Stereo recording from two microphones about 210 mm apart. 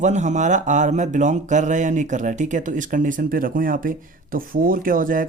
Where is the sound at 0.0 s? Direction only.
35° right (ahead or behind).